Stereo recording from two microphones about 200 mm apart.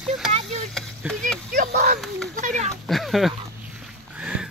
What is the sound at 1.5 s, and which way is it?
Speech, 50° right (ahead or behind).